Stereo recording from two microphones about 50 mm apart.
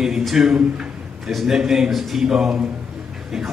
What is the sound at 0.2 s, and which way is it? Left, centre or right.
A man's voice, centre.